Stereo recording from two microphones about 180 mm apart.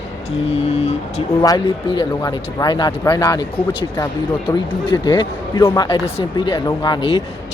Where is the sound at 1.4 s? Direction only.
25° left (ahead or behind).